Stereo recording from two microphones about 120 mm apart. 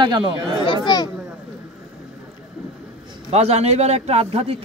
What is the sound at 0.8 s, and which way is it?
Speech, 35° left (ahead or behind).